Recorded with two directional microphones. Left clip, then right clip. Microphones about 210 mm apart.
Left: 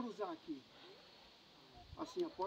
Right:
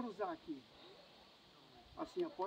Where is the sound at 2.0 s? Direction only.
10° left (ahead or behind).